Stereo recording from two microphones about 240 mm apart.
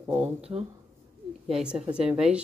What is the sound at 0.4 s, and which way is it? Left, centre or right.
Speech, right.